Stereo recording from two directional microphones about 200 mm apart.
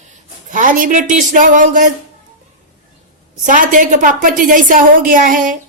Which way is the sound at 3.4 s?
40° right (ahead or behind).